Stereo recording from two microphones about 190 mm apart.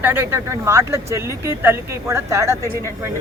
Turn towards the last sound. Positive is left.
turn(degrees=-15)  # may be behind; listen again after turning